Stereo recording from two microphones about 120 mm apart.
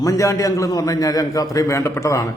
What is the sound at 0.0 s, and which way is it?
A man's voice, 25° left (ahead or behind).